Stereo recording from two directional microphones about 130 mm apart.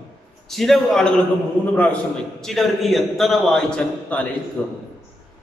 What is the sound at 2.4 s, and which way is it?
A man's voice, centre (ahead or behind).